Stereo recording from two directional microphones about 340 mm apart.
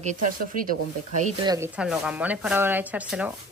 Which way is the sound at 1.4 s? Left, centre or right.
Centre.